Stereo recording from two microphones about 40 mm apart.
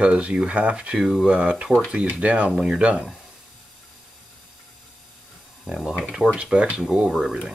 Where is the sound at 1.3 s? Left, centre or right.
Right.